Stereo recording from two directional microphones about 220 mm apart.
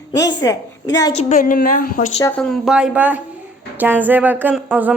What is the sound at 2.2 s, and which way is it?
Speech, 5° left (ahead or behind).